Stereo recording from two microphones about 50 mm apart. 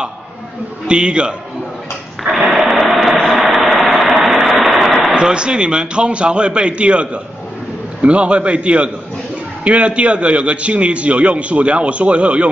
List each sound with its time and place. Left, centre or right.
0.8 s a man's voice: right
2.5 s radio: centre
3.3 s a sound: centre
5.1 s a man's voice: centre